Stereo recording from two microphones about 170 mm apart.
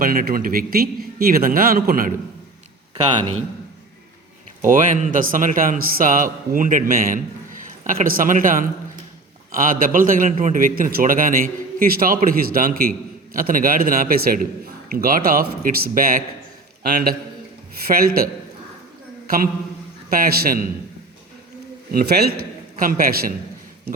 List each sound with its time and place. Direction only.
0.0 s a man's voice: 55° right (ahead or behind)
4.6 s a man's voice: 45° right (ahead or behind)
20.1 s a man's voice: 60° right (ahead or behind)
21.9 s a man's voice: 65° right (ahead or behind)